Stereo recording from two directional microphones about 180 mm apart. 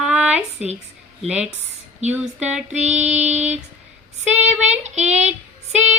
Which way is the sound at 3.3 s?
40° right (ahead or behind).